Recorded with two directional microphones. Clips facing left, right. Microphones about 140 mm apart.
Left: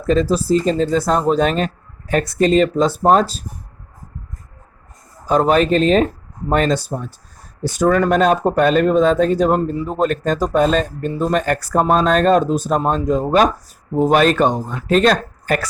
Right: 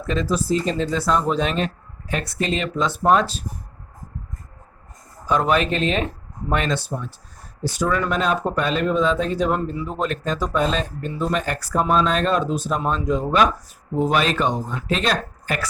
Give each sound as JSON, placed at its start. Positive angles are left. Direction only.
{"t": 0.0, "sound": "speech", "side_deg": 40}
{"t": 5.2, "sound": "speech", "side_deg": 40}